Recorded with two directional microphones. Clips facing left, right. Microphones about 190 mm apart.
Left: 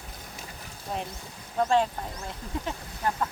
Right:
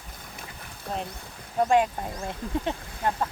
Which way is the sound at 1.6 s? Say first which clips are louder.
Right 2 dB; 15° right (ahead or behind).